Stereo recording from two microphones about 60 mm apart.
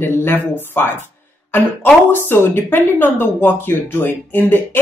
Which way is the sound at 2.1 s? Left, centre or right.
Left.